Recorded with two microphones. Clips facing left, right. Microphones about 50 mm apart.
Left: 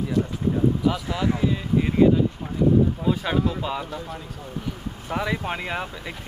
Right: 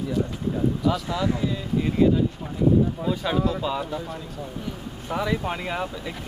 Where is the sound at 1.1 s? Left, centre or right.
Left.